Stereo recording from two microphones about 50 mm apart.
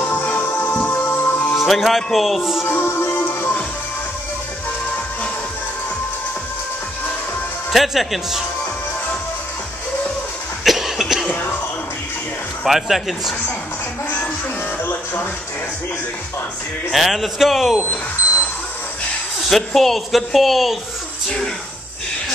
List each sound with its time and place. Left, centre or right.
0.2 s music: left
1.6 s speech: centre
2.6 s music: left
7.7 s speech: centre
10.6 s cough: centre
12.6 s speech: centre
16.9 s speech: centre
19.5 s speech: centre